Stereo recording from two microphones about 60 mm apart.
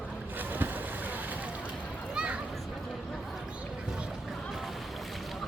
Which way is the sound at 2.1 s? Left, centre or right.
Centre.